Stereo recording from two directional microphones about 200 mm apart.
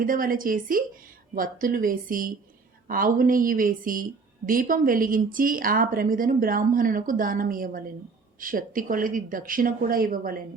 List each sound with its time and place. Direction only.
0.0 s speech: 45° right (ahead or behind)